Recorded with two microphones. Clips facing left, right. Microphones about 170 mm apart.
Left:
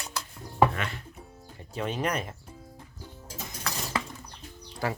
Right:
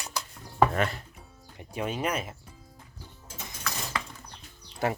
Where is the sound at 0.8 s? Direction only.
40° right (ahead or behind).